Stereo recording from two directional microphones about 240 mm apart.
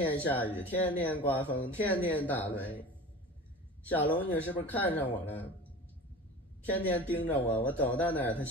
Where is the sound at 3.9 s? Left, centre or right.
Centre.